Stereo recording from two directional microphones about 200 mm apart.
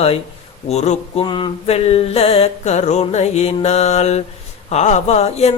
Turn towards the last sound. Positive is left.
turn(degrees=30)  # may be behind; listen again after turning